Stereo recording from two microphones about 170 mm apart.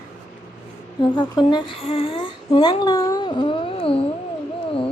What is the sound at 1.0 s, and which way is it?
Speech, 25° left (ahead or behind).